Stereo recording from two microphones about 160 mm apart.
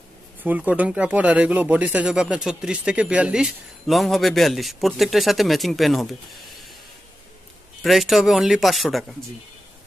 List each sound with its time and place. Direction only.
0.4 s speech: 10° right (ahead or behind)
7.8 s speech: centre (ahead or behind)